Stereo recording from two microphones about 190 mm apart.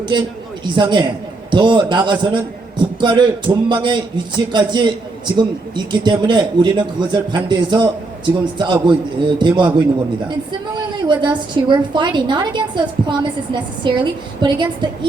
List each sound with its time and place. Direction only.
0.6 s a man's voice: 25° right (ahead or behind)
11.1 s a man's voice: 25° right (ahead or behind)